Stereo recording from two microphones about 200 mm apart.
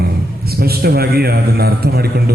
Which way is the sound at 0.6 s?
50° right (ahead or behind).